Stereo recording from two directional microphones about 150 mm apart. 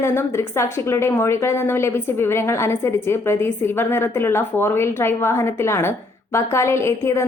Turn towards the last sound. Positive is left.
turn(degrees=20)  # may be behind; listen again after turning